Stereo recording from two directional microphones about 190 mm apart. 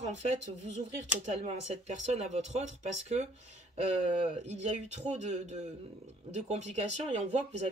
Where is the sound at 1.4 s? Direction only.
35° right (ahead or behind).